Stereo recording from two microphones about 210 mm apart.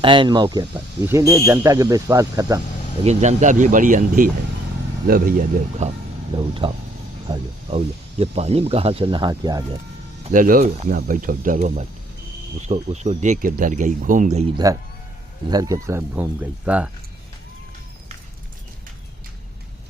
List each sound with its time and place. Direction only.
0.0 s speech: 25° right (ahead or behind)
3.0 s speech: 30° right (ahead or behind)
6.5 s speech: 25° right (ahead or behind)
10.2 s speech: 40° right (ahead or behind)
14.6 s speech: 15° right (ahead or behind)